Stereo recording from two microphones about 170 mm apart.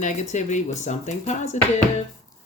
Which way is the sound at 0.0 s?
45° left (ahead or behind).